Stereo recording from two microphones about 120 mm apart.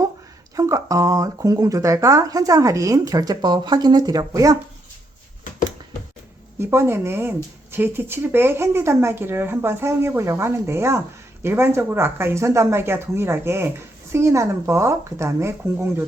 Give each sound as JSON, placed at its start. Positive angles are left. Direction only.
{"t": 0.5, "sound": "speech", "side_deg": -30}
{"t": 6.6, "sound": "speech", "side_deg": -20}